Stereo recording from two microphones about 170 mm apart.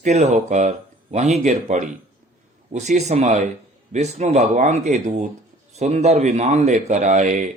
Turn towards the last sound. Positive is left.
turn(degrees=-45)  # may be behind; listen again after turning